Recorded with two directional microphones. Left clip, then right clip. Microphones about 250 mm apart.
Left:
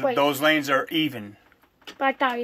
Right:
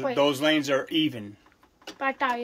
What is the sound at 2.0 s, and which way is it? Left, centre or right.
Speech, left.